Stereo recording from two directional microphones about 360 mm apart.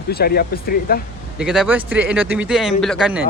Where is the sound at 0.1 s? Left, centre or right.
Left.